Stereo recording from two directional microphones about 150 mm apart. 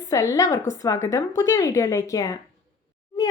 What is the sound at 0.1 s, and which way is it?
Speech, 20° left (ahead or behind).